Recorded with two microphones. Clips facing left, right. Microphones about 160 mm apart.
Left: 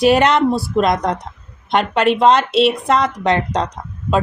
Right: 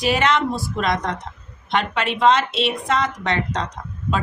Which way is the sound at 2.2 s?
40° left (ahead or behind).